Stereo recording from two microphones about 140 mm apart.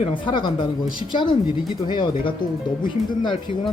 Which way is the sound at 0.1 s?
35° left (ahead or behind).